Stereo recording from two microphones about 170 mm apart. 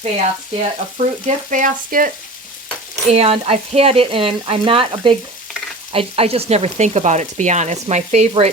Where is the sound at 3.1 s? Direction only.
40° right (ahead or behind).